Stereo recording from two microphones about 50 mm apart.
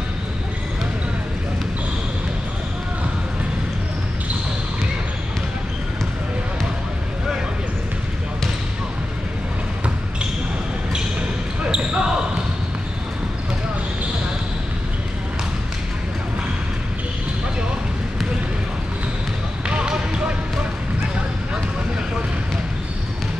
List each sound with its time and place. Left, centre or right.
11.6 s basketball bounce: centre
19.6 s basketball bounce: centre